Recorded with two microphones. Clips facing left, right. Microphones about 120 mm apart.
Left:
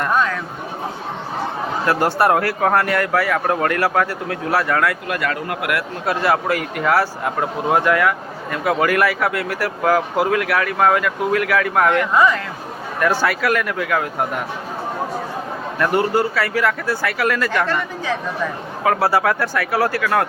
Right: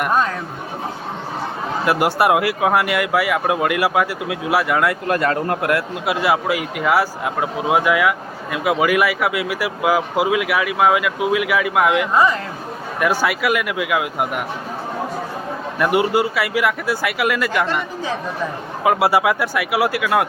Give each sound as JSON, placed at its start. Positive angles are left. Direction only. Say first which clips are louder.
{"t": 0.1, "sound": "a sound", "louder": "left 1 dB", "side_deg": -35}
{"t": 1.8, "sound": "speech", "louder": "even", "side_deg": -10}
{"t": 5.0, "sound": "speech", "louder": "right 4 dB", "side_deg": -35}
{"t": 6.1, "sound": "speech", "louder": "even", "side_deg": -5}
{"t": 12.1, "sound": "speech", "louder": "left 1 dB", "side_deg": -30}
{"t": 13.0, "sound": "speech", "louder": "even", "side_deg": -10}
{"t": 15.8, "sound": "speech", "louder": "right 1 dB", "side_deg": -10}